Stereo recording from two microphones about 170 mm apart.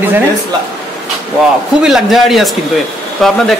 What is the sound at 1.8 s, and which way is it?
A man's voice, centre (ahead or behind).